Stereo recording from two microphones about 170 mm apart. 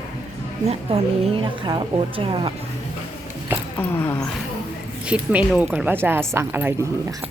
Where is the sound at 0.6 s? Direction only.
35° right (ahead or behind).